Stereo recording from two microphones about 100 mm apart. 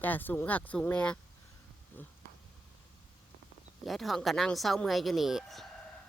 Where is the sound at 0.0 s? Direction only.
20° left (ahead or behind).